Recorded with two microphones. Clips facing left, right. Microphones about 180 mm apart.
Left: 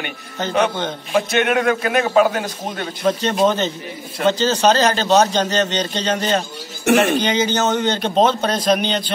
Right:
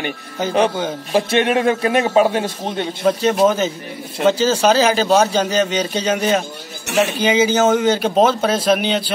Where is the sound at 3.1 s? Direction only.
5° right (ahead or behind).